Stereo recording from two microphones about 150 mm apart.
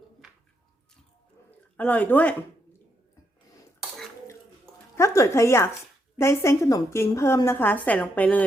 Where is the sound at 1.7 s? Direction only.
10° left (ahead or behind).